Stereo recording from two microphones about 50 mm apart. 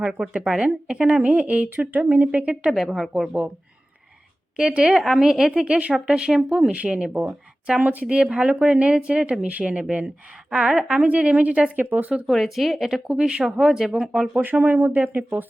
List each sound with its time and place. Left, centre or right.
0.2 s a woman's voice: centre
1.2 s speech: right
1.7 s speech: right
2.5 s speech: right
2.7 s a woman's voice: centre
4.5 s a woman's voice: centre
7.1 s speech: right
8.0 s a woman's voice: right
11.0 s speech: right
11.8 s speech: right
12.3 s speech: centre
13.1 s a woman's voice: centre
14.4 s speech: right